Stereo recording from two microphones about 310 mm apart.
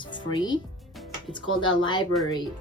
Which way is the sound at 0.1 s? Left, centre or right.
Centre.